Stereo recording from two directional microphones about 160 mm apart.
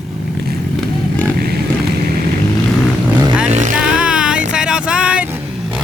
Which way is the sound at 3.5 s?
50° right (ahead or behind).